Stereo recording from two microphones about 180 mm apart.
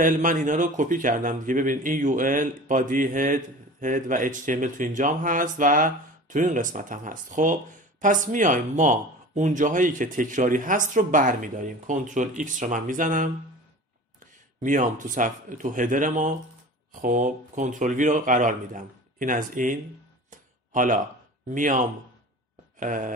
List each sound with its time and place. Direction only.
0.0 s speech: 45° right (ahead or behind)
20.2 s a sound: 45° right (ahead or behind)
21.5 s speech: 45° right (ahead or behind)